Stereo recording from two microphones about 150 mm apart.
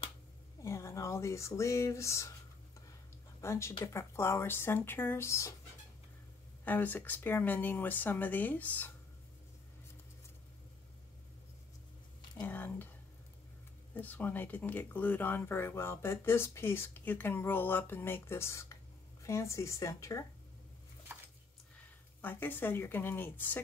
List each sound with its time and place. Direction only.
0.6 s speech: 20° left (ahead or behind)
3.3 s speech: 20° left (ahead or behind)
6.6 s speech: 10° left (ahead or behind)
12.4 s a sound: 15° left (ahead or behind)
13.9 s speech: 10° left (ahead or behind)
22.2 s speech: 10° left (ahead or behind)